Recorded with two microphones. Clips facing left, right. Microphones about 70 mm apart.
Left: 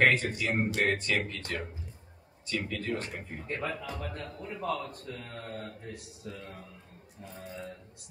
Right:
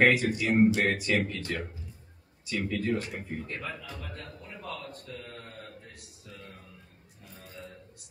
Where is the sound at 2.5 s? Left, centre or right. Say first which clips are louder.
Right 3 dB; centre.